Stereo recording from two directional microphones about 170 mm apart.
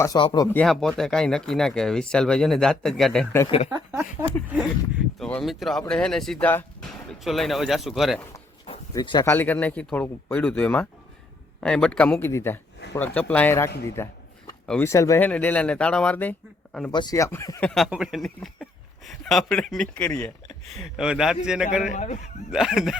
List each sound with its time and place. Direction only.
0.2 s speech: 30° left (ahead or behind)
0.5 s speech: 5° left (ahead or behind)
3.7 s speech: 15° right (ahead or behind)
8.6 s a sound: 30° left (ahead or behind)
9.3 s speech: 10° left (ahead or behind)
13.8 s a sound: 15° left (ahead or behind)
14.7 s speech: 15° left (ahead or behind)
16.9 s speech: 25° left (ahead or behind)
17.7 s speech: centre (ahead or behind)
21.9 s speech: 45° left (ahead or behind)
22.5 s speech: centre (ahead or behind)